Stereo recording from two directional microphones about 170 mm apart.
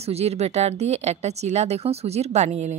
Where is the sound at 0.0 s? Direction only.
40° right (ahead or behind).